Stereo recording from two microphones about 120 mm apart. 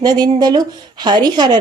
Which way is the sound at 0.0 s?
35° right (ahead or behind).